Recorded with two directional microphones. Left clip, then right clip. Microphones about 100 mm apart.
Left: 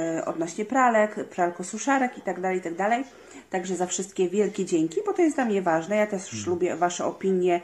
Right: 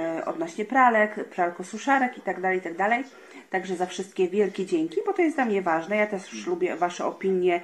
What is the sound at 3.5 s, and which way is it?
Speech, 15° left (ahead or behind).